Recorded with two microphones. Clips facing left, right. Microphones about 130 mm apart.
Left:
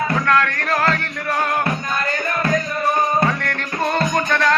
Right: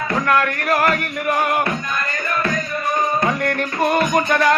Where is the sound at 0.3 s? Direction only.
10° right (ahead or behind).